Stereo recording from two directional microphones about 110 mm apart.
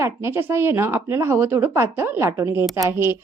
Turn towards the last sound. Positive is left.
turn(degrees=-25)  # may be behind; listen again after turning